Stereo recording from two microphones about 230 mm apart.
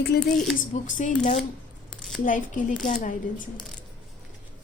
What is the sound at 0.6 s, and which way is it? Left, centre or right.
A woman's voice, left.